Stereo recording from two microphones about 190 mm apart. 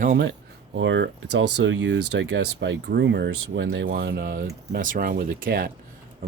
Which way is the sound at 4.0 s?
60° right (ahead or behind).